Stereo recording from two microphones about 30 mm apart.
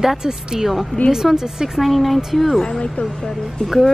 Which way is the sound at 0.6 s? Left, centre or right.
Centre.